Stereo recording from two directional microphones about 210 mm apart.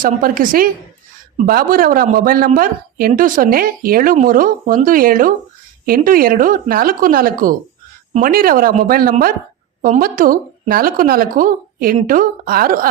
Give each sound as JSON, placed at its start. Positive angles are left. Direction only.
{"t": 0.0, "sound": "a woman's voice", "side_deg": -40}